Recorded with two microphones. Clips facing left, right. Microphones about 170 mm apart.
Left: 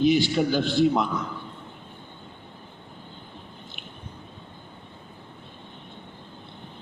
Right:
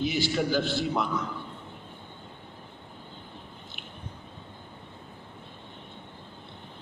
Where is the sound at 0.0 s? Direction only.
20° left (ahead or behind).